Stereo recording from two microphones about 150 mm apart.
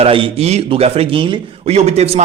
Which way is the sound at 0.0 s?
40° right (ahead or behind).